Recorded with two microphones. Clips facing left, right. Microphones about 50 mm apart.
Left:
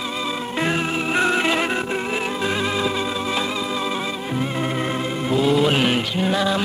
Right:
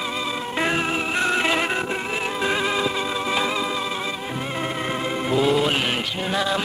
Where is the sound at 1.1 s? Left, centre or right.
Centre.